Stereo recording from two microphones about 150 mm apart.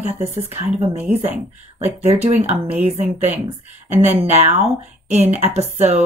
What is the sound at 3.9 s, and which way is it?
Speech, 15° right (ahead or behind).